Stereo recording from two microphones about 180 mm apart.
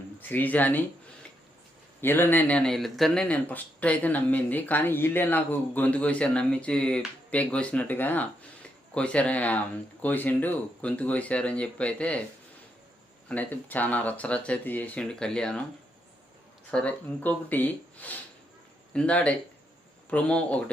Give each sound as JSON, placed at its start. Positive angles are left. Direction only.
{"t": 0.2, "sound": "speech", "side_deg": 10}
{"t": 2.0, "sound": "speech", "side_deg": 10}
{"t": 13.2, "sound": "speech", "side_deg": 10}
{"t": 16.7, "sound": "speech", "side_deg": 10}